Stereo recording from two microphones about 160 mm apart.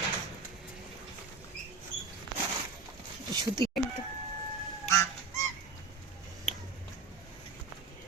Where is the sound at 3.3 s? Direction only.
25° right (ahead or behind).